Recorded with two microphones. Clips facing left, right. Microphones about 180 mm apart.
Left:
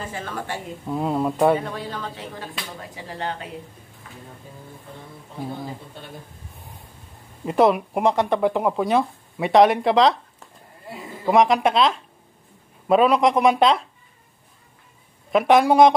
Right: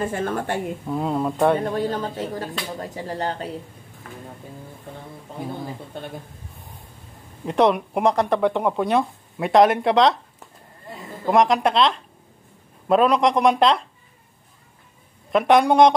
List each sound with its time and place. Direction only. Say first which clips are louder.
0.0 s speech: right 7 dB; 50° right (ahead or behind)
0.8 s speech: left 2 dB; centre (ahead or behind)
1.6 s speech: right 7 dB; 45° right (ahead or behind)
7.4 s a woman's voice: left 1 dB; centre (ahead or behind)
15.3 s speech: even; centre (ahead or behind)